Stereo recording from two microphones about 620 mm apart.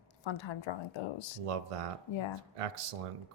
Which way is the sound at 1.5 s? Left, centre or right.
Right.